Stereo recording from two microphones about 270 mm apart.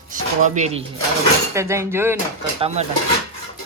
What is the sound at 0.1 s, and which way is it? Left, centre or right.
Speech, right.